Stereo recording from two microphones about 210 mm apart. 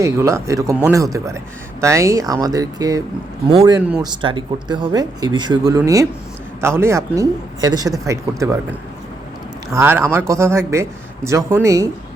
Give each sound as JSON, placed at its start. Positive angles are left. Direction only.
{"t": 0.0, "sound": "a man's voice", "side_deg": -15}
{"t": 9.7, "sound": "a man's voice", "side_deg": -10}